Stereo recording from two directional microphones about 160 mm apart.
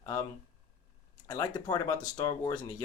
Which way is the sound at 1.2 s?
25° left (ahead or behind).